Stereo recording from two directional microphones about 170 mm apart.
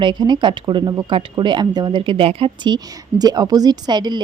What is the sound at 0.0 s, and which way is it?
Speech, 25° right (ahead or behind).